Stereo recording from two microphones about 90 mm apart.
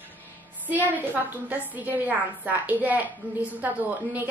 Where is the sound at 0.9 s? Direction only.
20° right (ahead or behind).